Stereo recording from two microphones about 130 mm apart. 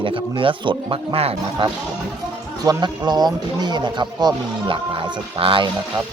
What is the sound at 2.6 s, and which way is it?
Speech, 30° right (ahead or behind).